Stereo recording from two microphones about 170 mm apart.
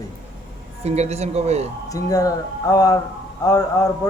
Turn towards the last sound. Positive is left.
turn(degrees=20)  # may be behind; listen again after turning